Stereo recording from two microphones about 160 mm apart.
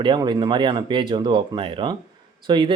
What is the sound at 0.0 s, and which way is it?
Speech, 30° right (ahead or behind).